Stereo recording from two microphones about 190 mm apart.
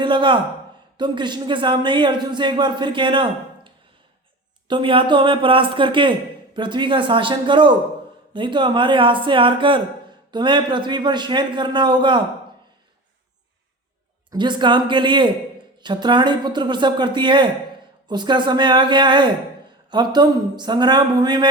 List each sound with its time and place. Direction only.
0.0 s a man's voice: 25° right (ahead or behind)
4.7 s a man's voice: 25° right (ahead or behind)
14.3 s a man's voice: 25° right (ahead or behind)